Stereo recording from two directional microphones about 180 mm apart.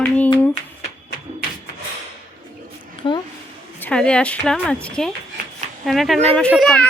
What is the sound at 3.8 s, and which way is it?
A woman's voice, 5° left (ahead or behind).